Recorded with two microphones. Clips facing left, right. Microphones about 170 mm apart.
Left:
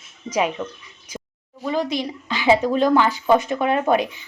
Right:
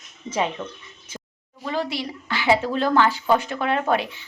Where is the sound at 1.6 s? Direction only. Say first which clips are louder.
Left 4 dB; 15° left (ahead or behind).